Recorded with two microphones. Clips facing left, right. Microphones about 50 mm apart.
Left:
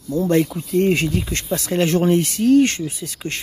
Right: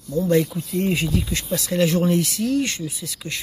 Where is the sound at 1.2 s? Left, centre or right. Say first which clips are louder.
Left 2 dB; left.